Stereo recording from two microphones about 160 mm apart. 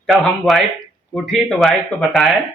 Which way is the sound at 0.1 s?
Centre (ahead or behind).